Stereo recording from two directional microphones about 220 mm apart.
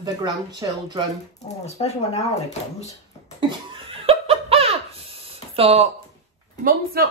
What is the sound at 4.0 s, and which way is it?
Laughter, 25° right (ahead or behind).